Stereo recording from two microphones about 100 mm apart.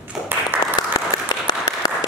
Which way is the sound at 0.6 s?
40° left (ahead or behind).